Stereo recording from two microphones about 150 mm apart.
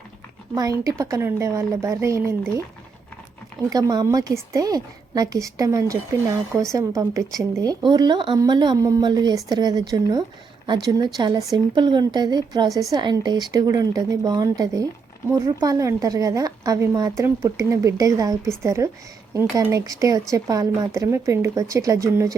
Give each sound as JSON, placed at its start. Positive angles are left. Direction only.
{"t": 0.5, "sound": "a woman's voice", "side_deg": -25}
{"t": 3.7, "sound": "a woman's voice", "side_deg": -25}